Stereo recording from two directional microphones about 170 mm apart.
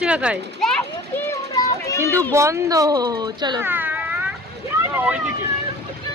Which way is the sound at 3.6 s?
10° right (ahead or behind).